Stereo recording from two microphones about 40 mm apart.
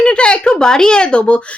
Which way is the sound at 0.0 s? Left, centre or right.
Left.